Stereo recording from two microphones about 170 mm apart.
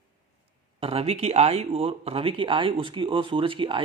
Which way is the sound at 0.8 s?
35° right (ahead or behind).